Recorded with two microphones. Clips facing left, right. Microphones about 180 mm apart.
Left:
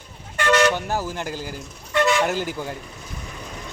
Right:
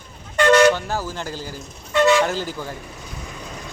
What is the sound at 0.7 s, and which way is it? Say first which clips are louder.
Speech: left 1 dB; 15° left (ahead or behind).